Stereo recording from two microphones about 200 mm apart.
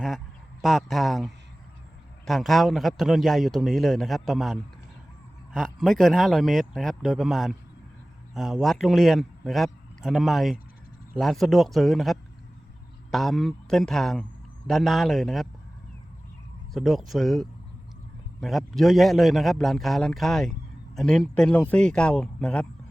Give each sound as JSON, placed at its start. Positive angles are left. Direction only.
{"t": 0.6, "sound": "a man's voice", "side_deg": 0}
{"t": 16.7, "sound": "a man's voice", "side_deg": 0}